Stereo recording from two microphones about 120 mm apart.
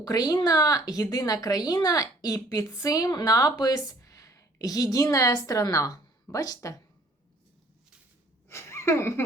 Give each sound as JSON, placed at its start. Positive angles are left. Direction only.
{"t": 0.0, "sound": "a woman's voice", "side_deg": 30}
{"t": 8.4, "sound": "speech", "side_deg": 20}